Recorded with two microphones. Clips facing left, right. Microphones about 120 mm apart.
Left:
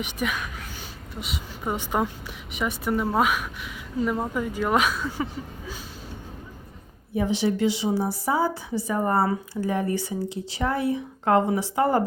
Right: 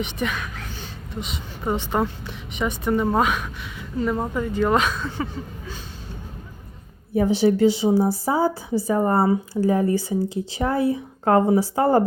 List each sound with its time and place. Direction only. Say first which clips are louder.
0.0 s a woman's voice: right 2 dB; 10° left (ahead or behind)
7.2 s speech: right 6 dB; 35° right (ahead or behind)